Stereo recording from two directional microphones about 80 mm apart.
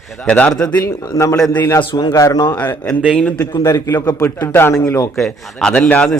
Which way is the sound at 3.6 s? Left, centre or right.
Left.